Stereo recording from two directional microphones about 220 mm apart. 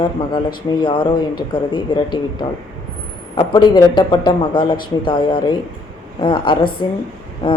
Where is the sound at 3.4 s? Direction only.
20° left (ahead or behind).